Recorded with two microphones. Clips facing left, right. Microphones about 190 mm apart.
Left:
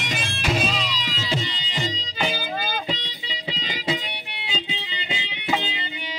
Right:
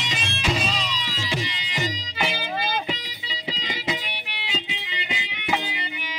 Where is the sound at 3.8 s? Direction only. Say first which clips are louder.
Left 4 dB; 30° left (ahead or behind).